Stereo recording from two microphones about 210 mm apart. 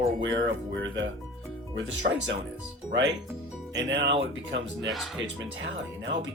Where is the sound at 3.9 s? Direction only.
60° right (ahead or behind).